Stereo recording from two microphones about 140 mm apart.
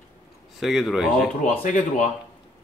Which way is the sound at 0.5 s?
Centre (ahead or behind).